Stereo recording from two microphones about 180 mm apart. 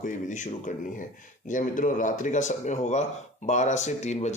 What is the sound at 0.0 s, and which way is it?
A man's voice, 45° left (ahead or behind).